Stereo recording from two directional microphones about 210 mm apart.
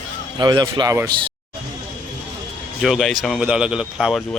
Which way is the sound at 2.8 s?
Centre (ahead or behind).